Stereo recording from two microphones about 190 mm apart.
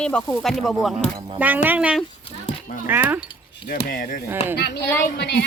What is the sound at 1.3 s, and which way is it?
Speech, 10° right (ahead or behind).